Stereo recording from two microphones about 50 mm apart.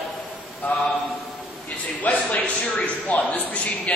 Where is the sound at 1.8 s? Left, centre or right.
Left.